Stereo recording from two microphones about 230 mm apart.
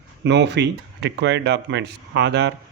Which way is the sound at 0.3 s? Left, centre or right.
Right.